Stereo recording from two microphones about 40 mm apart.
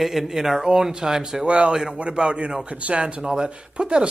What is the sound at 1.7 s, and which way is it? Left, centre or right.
A man's voice, centre.